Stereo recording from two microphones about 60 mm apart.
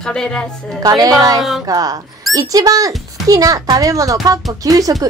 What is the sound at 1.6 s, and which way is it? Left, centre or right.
A child's voice, right.